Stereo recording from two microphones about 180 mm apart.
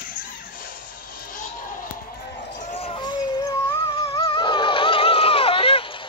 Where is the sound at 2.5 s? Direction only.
40° left (ahead or behind).